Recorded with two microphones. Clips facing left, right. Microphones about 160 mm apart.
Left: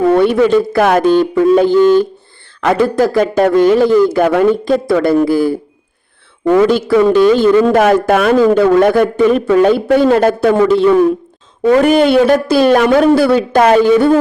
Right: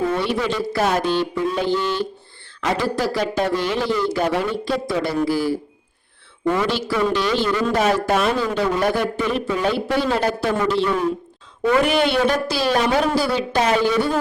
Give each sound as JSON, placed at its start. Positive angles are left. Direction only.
{"t": 0.1, "sound": "a man's voice", "side_deg": 55}
{"t": 6.6, "sound": "a man's voice", "side_deg": 55}